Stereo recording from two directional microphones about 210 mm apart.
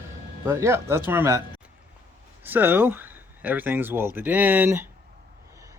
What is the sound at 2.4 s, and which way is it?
Speech, 10° right (ahead or behind).